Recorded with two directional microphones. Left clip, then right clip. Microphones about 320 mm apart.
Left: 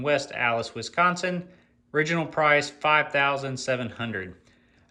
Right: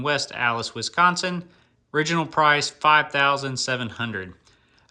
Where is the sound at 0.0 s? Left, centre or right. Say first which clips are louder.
Right 1 dB; centre.